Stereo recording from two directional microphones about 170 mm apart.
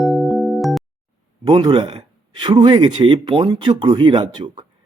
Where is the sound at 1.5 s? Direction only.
25° right (ahead or behind).